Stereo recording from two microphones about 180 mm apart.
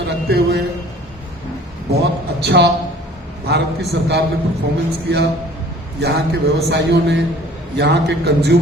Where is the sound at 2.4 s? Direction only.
65° right (ahead or behind).